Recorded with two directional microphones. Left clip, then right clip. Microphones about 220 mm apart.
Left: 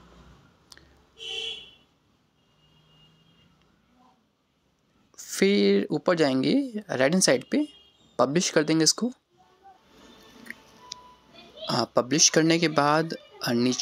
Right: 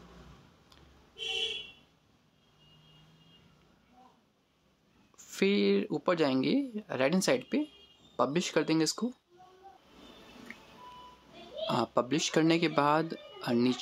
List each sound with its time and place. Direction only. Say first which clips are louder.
0.7 s a sound: left 10 dB; 20° left (ahead or behind)
5.1 s speech: left 6 dB; 20° left (ahead or behind)
11.6 s speech: left 5 dB; 15° left (ahead or behind)